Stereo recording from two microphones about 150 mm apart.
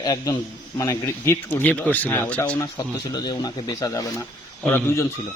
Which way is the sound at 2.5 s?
25° left (ahead or behind).